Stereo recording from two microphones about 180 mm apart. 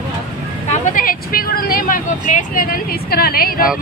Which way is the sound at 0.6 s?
40° left (ahead or behind).